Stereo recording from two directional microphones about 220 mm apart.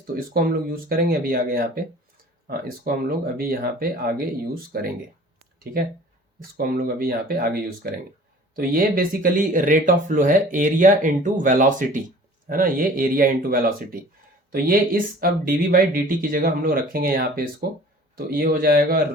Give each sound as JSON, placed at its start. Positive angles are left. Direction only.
{"t": 0.1, "sound": "speech", "side_deg": -40}
{"t": 6.6, "sound": "speech", "side_deg": -45}